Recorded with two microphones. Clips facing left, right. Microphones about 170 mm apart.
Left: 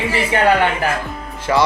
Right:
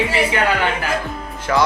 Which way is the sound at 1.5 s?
5° left (ahead or behind).